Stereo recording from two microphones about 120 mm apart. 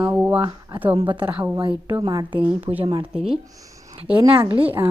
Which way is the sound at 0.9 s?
45° right (ahead or behind).